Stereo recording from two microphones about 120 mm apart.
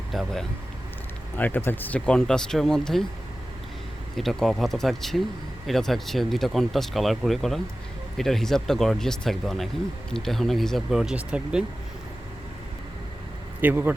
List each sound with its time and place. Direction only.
0.1 s speech: centre (ahead or behind)
1.4 s speech: 15° left (ahead or behind)
4.2 s speech: centre (ahead or behind)
13.6 s speech: 15° right (ahead or behind)